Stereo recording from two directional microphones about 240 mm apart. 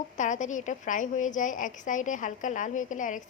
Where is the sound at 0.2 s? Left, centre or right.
Left.